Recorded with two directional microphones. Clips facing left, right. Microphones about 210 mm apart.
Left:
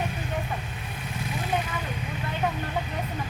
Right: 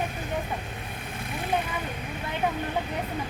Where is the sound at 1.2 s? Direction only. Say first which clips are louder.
Left 2 dB; 55° right (ahead or behind).